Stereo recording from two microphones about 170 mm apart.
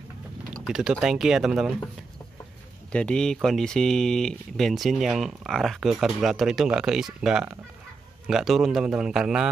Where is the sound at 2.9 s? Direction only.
5° left (ahead or behind).